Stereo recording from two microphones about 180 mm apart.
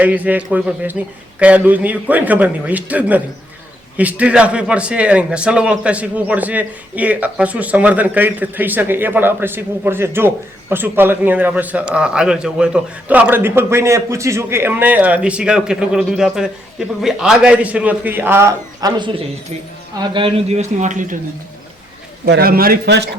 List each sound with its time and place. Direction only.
0.0 s a man's voice: 10° right (ahead or behind); by 21.2 s 45° right (ahead or behind)
22.3 s a man's voice: 60° right (ahead or behind)